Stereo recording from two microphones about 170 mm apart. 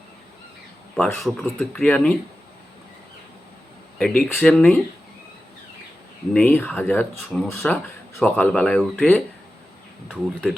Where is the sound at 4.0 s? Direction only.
5° left (ahead or behind).